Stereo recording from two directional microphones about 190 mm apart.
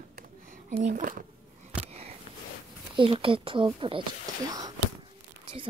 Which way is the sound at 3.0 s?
30° right (ahead or behind).